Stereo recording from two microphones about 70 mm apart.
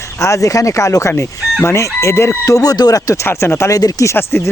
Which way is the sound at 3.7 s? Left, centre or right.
Left.